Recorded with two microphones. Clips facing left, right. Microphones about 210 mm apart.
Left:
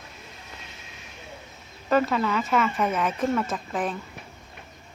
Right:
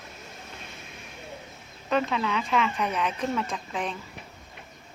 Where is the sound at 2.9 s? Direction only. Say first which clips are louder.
Left 3 dB; 45° left (ahead or behind).